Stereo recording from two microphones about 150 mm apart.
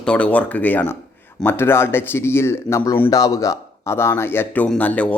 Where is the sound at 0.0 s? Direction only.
10° left (ahead or behind).